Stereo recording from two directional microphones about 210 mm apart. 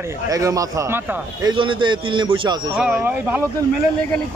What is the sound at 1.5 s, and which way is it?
A man's voice, 25° right (ahead or behind).